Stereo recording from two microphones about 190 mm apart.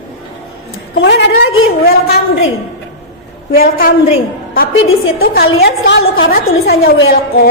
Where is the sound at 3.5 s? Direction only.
50° left (ahead or behind).